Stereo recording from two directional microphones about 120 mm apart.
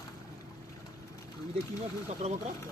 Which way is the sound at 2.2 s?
65° right (ahead or behind).